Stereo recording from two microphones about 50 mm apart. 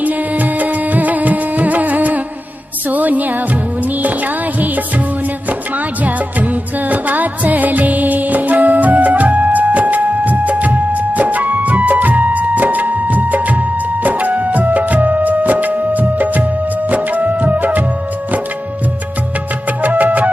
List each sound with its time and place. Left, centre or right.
0.0 s music: right
19.8 s music: right